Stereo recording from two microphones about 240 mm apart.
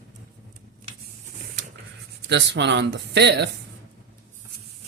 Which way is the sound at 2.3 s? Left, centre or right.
Right.